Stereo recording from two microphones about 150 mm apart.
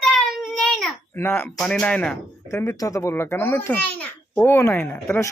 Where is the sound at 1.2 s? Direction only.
15° left (ahead or behind).